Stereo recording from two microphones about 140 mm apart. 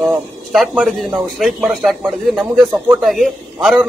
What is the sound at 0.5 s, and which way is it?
A man's voice, centre (ahead or behind).